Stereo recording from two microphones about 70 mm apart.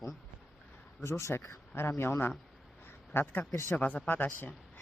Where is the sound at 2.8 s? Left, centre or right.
Left.